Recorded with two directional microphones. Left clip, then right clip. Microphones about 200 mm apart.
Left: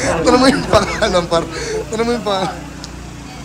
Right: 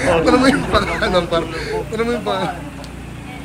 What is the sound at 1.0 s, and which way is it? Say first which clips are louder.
Speech: left 2 dB; 15° left (ahead or behind).